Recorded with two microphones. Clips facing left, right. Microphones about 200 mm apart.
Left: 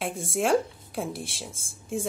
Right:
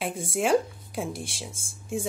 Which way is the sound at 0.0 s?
Centre (ahead or behind).